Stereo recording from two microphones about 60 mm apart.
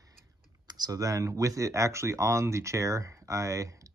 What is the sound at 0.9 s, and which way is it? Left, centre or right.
Speech, right.